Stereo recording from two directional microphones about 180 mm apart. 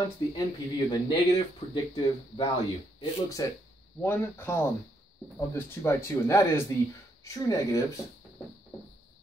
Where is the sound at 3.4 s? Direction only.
20° left (ahead or behind).